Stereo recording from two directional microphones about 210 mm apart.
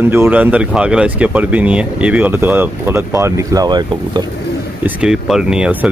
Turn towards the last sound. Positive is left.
turn(degrees=-5)  # may be behind; listen again after turning